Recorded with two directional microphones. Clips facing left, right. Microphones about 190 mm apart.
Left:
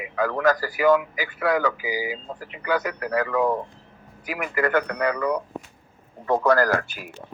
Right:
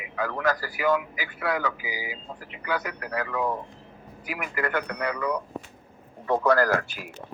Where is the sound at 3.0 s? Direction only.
90° left.